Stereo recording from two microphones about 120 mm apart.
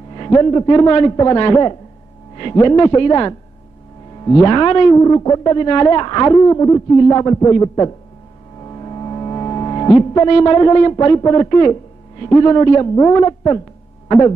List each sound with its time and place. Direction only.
0.1 s speech: 35° left (ahead or behind)
2.5 s a man's voice: 25° left (ahead or behind)
6.3 s a man's voice: 25° left (ahead or behind)
8.5 s music: 40° left (ahead or behind)
11.1 s speech: 30° left (ahead or behind)
12.9 s a man's voice: 20° left (ahead or behind)
13.2 s speech: 30° left (ahead or behind)